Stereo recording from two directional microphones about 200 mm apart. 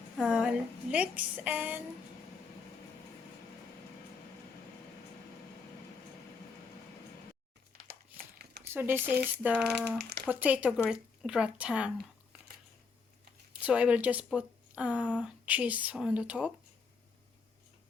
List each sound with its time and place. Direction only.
0.2 s a woman's voice: 5° right (ahead or behind)
8.7 s a woman's voice: 10° right (ahead or behind)
9.4 s a sound: 5° right (ahead or behind)
10.0 s a sound: 55° right (ahead or behind)
10.2 s speech: 10° right (ahead or behind)
13.5 s a woman's voice: 5° right (ahead or behind)